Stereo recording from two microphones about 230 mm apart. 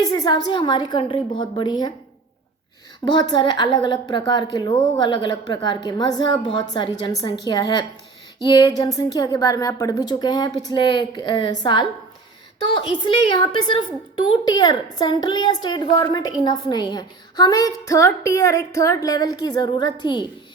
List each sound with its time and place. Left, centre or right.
0.0 s a woman's voice: centre
3.0 s a woman's voice: centre
12.9 s a woman's voice: centre